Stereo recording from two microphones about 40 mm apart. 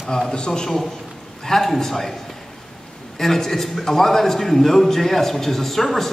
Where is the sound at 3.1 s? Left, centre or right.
Centre.